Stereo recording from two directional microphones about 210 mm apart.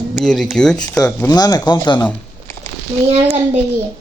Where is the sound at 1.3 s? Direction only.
20° left (ahead or behind).